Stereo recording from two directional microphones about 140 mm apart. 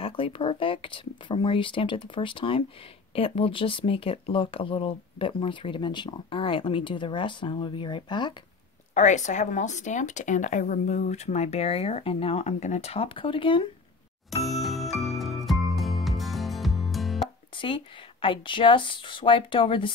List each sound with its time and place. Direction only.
0.0 s speech: 40° left (ahead or behind)
8.9 s a woman's voice: 60° left (ahead or behind); by 13.7 s 35° left (ahead or behind)
14.4 s music: centre (ahead or behind)
17.6 s speech: 35° left (ahead or behind)